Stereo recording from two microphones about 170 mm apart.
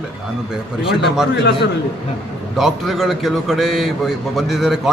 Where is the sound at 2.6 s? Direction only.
Centre (ahead or behind).